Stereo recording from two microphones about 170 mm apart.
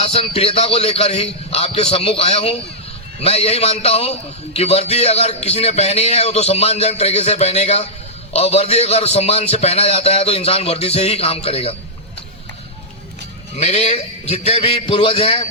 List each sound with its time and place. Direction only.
0.0 s a man's voice: 35° left (ahead or behind)
13.6 s a man's voice: 40° left (ahead or behind)